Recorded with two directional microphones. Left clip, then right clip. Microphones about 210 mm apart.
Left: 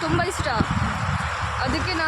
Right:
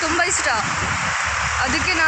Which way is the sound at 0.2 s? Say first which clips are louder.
Right 5 dB; centre (ahead or behind).